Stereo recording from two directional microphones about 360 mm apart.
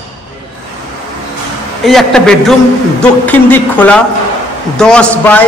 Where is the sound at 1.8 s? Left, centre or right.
Centre.